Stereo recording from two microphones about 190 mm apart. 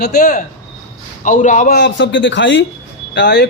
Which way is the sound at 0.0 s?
40° left (ahead or behind).